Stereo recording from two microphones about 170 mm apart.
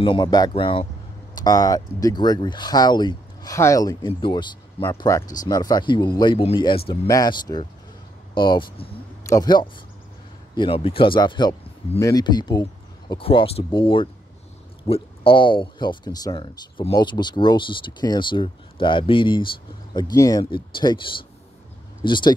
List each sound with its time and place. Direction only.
0.0 s speech: 25° left (ahead or behind)